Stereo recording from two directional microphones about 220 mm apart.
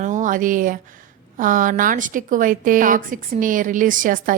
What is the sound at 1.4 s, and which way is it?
Speech, 35° right (ahead or behind).